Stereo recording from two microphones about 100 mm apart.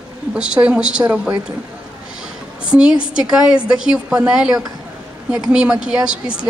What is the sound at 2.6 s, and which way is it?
A woman's voice, 10° right (ahead or behind).